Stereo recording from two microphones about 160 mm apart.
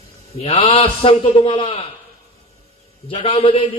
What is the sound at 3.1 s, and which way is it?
Speech, 35° left (ahead or behind).